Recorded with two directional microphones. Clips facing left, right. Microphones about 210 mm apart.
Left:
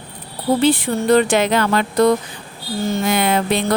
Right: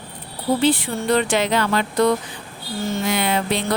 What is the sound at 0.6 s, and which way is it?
Speech, 45° left (ahead or behind).